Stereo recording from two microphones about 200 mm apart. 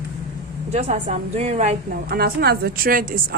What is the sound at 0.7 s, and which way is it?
A woman's voice, 35° right (ahead or behind).